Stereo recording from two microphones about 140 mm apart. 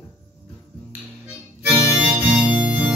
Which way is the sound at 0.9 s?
10° right (ahead or behind).